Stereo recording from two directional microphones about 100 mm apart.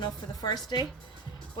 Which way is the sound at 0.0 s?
45° left (ahead or behind).